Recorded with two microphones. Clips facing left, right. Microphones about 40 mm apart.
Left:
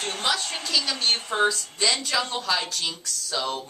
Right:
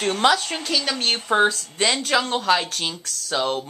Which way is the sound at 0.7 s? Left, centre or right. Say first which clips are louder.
Right 1 dB; right.